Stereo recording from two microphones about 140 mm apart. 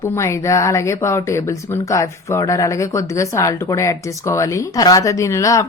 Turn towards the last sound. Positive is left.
turn(degrees=25)  # may be behind; listen again after turning